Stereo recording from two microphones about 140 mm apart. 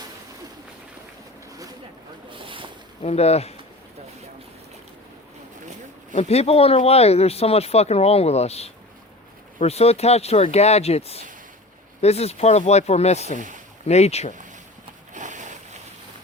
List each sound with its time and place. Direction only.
2.3 s boat: 40° right (ahead or behind)
3.0 s speech: 50° left (ahead or behind)
6.1 s speech: 50° left (ahead or behind)
15.1 s a sound: 60° right (ahead or behind)